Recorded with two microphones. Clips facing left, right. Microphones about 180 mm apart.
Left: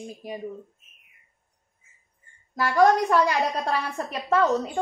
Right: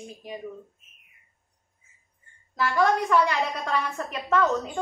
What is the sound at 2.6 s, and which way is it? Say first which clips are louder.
A woman's voice: left 4 dB; 40° left (ahead or behind).